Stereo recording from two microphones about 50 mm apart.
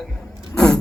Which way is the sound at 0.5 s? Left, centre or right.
Centre.